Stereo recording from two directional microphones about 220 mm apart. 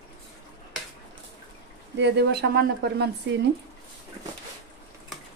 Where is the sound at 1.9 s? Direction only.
50° right (ahead or behind).